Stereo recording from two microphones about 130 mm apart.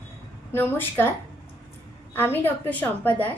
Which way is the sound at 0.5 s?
15° left (ahead or behind).